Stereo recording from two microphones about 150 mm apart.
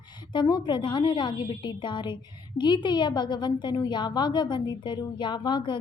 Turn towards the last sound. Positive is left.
turn(degrees=30)  # may be behind; listen again after turning